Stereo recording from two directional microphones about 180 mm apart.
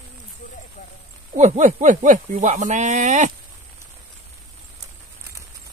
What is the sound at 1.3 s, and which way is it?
Speech, 40° right (ahead or behind).